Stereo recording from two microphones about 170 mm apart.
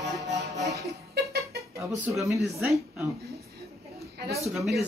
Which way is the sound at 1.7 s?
15° right (ahead or behind).